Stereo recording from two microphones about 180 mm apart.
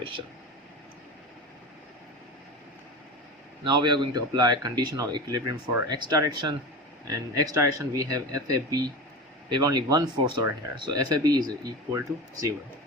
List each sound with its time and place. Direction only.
3.6 s speech: 25° right (ahead or behind)